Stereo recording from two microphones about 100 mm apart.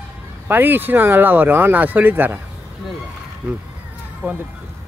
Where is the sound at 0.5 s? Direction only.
20° right (ahead or behind).